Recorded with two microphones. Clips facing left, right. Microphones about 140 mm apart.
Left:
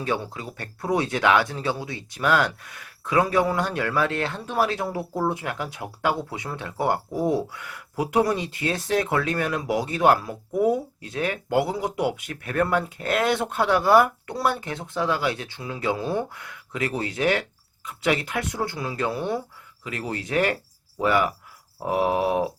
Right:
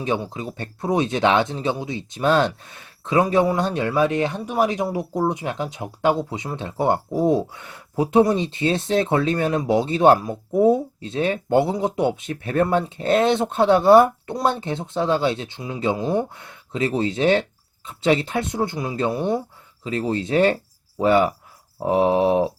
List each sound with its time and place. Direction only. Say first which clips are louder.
0.0 s speech: right 3 dB; 20° right (ahead or behind)